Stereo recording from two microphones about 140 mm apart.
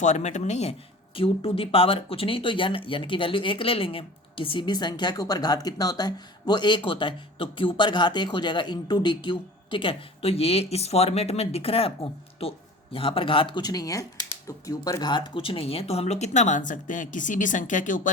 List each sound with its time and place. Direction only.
0.0 s speech: 55° left (ahead or behind)